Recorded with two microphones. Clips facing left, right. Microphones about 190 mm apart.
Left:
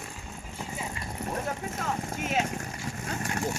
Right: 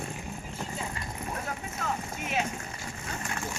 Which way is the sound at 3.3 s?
40° left (ahead or behind).